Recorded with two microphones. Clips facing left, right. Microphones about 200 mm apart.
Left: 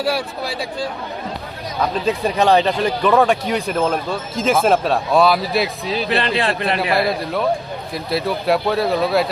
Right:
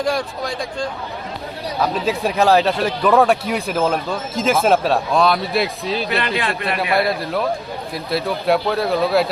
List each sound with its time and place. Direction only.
0.0 s speech: 5° left (ahead or behind)
1.8 s speech: 5° right (ahead or behind)
6.1 s speech: 30° left (ahead or behind)
6.9 s speech: centre (ahead or behind)